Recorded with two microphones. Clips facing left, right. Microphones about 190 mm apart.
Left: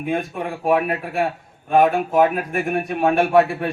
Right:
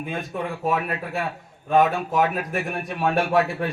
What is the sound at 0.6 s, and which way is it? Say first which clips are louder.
A man's voice: left 8 dB; 55° left (ahead or behind).